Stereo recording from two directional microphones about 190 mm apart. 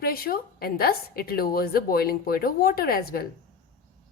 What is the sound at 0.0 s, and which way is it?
A woman's voice, 50° left (ahead or behind).